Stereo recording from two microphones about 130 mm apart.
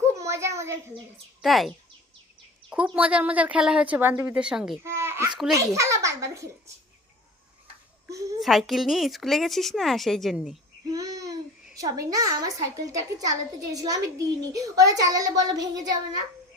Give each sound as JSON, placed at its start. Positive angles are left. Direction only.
{"t": 0.2, "sound": "a sound", "side_deg": -20}
{"t": 1.4, "sound": "speech", "side_deg": 0}
{"t": 4.8, "sound": "a child's voice", "side_deg": -20}
{"t": 8.4, "sound": "a woman's voice", "side_deg": 0}
{"t": 10.9, "sound": "babbling", "side_deg": -25}
{"t": 11.8, "sound": "a child's voice", "side_deg": -25}